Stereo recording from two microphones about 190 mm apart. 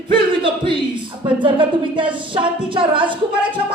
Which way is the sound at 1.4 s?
25° right (ahead or behind).